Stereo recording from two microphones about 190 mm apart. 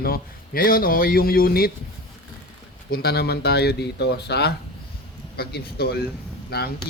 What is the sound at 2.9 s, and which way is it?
A man's voice, 55° left (ahead or behind).